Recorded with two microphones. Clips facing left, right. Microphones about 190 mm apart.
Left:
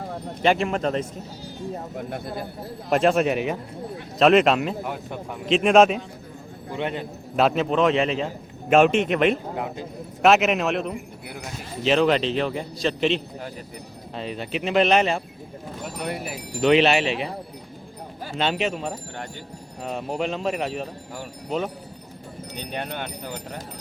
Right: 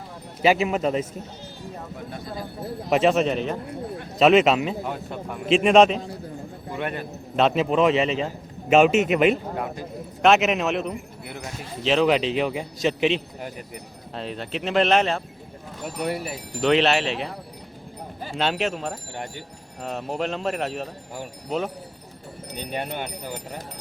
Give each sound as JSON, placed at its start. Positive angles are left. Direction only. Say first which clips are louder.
{"t": 0.4, "sound": "speech", "louder": "right 1 dB", "side_deg": -5}
{"t": 2.0, "sound": "speech", "louder": "left 2 dB", "side_deg": 60}
{"t": 2.9, "sound": "a man's voice", "louder": "even", "side_deg": 0}
{"t": 4.2, "sound": "a man's voice", "louder": "even", "side_deg": 0}
{"t": 4.9, "sound": "a man's voice", "louder": "right 1 dB", "side_deg": 15}
{"t": 5.5, "sound": "a man's voice", "louder": "even", "side_deg": 0}
{"t": 6.7, "sound": "a man's voice", "louder": "left 1 dB", "side_deg": 20}
{"t": 7.3, "sound": "a man's voice", "louder": "even", "side_deg": 0}
{"t": 22.7, "sound": "speech", "louder": "right 1 dB", "side_deg": -10}